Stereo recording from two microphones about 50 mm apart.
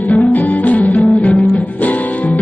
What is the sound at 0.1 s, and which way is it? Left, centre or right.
Music, left.